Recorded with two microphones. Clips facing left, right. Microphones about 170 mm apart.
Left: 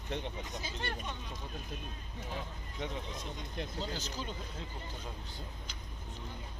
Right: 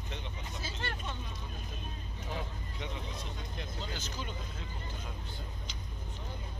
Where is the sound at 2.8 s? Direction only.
45° left (ahead or behind).